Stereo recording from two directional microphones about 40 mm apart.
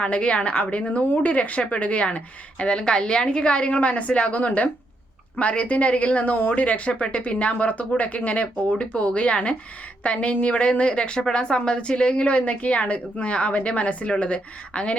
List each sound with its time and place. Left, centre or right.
0.0 s a woman's voice: left